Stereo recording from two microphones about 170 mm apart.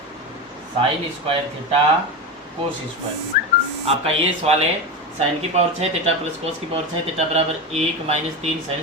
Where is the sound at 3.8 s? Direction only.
35° right (ahead or behind).